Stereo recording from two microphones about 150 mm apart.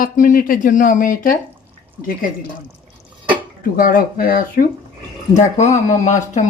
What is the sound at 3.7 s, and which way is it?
Speech, 70° left (ahead or behind).